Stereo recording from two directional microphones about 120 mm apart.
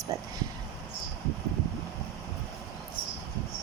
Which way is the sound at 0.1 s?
25° right (ahead or behind).